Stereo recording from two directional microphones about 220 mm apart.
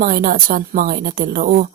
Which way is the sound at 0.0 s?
40° right (ahead or behind).